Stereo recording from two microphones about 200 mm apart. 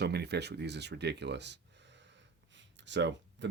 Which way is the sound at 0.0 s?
55° right (ahead or behind).